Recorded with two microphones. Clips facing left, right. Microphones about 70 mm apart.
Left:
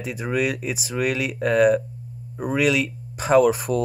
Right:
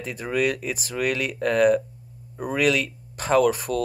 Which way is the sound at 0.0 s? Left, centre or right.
Centre.